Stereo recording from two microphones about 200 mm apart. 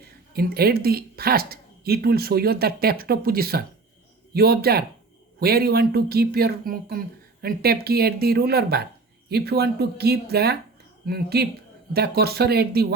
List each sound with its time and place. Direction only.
0.3 s a woman's voice: 50° right (ahead or behind)